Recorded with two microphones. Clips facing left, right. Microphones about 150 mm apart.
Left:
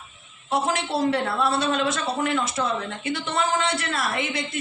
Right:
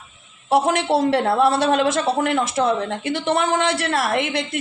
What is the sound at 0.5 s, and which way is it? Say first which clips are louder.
Speech: right 7 dB; 75° right (ahead or behind).